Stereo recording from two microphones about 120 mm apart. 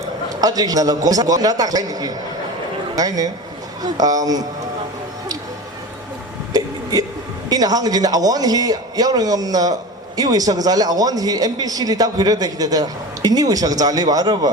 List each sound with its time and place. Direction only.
0.3 s a man's voice: 30° right (ahead or behind)
7.5 s speech: 30° right (ahead or behind)